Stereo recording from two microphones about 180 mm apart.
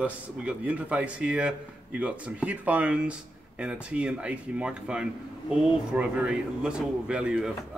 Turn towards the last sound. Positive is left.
turn(degrees=-5)  # may be behind; listen again after turning